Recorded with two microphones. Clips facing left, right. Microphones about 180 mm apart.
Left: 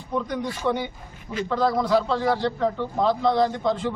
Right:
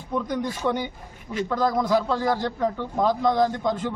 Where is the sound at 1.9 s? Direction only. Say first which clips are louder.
Left 1 dB; 10° right (ahead or behind).